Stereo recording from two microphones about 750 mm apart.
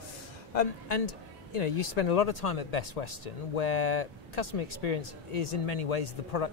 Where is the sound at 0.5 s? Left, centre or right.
Left.